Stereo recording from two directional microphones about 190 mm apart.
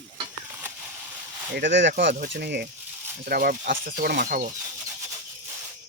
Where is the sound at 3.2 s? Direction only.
50° right (ahead or behind).